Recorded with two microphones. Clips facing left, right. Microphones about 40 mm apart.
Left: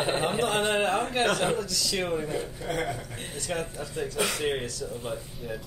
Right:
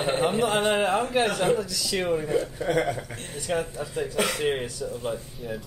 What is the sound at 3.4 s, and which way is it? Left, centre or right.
A man's voice, centre.